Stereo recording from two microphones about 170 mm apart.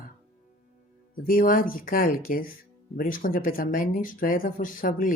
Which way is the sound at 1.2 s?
55° left (ahead or behind).